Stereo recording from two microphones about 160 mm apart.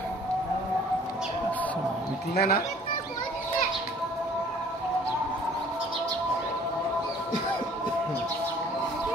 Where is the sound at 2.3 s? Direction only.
70° left (ahead or behind).